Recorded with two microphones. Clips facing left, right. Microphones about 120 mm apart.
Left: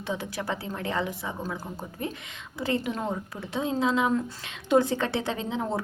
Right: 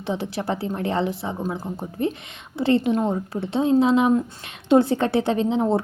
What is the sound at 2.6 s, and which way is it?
A woman's voice, 25° right (ahead or behind).